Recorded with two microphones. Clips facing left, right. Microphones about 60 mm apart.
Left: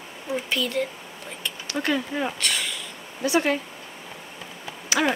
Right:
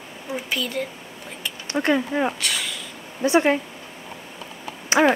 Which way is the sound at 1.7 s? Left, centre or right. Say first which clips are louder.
Right 5 dB; right.